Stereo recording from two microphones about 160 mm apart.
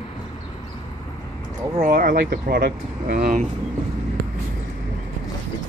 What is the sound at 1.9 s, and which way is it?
Speech, 70° right (ahead or behind).